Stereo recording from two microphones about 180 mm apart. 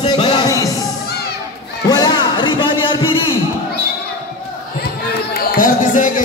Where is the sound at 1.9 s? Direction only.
25° left (ahead or behind).